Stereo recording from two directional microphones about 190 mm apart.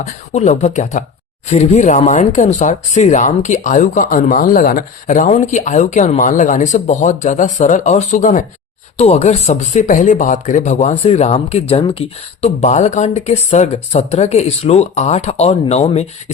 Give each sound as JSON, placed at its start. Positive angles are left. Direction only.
{"t": 0.0, "sound": "speech", "side_deg": 40}